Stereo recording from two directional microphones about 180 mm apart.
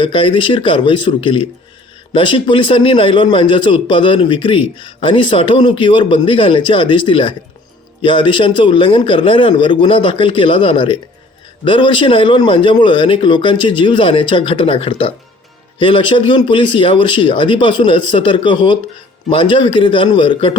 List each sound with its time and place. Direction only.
0.0 s a man's voice: 30° left (ahead or behind)